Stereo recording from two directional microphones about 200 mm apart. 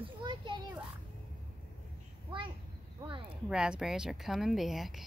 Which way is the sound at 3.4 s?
5° right (ahead or behind).